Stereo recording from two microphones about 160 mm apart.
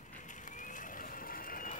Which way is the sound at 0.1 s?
50° left (ahead or behind).